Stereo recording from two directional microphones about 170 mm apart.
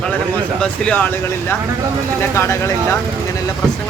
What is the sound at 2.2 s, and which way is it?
Speech, 15° left (ahead or behind).